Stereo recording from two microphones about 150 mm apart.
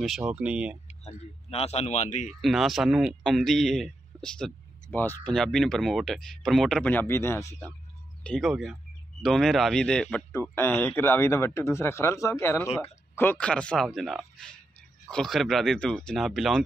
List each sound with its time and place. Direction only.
0.0 s speech: 5° right (ahead or behind)
0.8 s speech: 45° left (ahead or behind)
2.4 s a man's voice: centre (ahead or behind); by 7.4 s 20° left (ahead or behind)
8.2 s speech: 5° left (ahead or behind)